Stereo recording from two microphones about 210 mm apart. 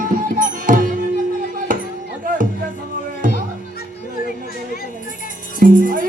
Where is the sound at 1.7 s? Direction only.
40° right (ahead or behind).